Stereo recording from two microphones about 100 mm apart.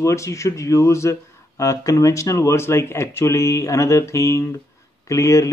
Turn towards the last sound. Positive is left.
turn(degrees=30)  # may be behind; listen again after turning